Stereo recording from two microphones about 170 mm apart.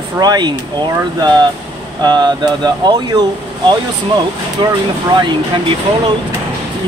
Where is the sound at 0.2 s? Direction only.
25° right (ahead or behind).